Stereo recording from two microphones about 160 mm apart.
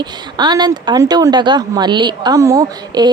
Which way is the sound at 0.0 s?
30° right (ahead or behind).